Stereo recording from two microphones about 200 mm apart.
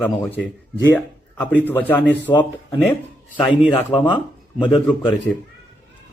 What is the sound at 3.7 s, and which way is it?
Speech, 25° left (ahead or behind).